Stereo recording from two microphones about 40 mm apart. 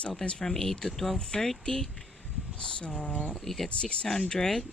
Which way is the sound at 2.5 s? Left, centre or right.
Left.